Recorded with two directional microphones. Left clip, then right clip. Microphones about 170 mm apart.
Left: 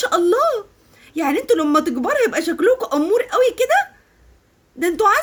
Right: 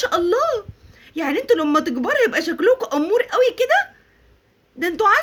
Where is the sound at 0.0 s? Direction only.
5° left (ahead or behind).